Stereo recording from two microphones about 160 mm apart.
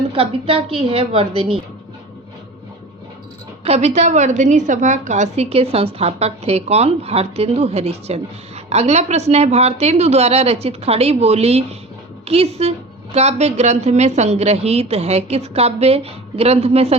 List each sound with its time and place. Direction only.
0.1 s a woman's voice: 35° right (ahead or behind)
3.6 s a woman's voice: 40° right (ahead or behind)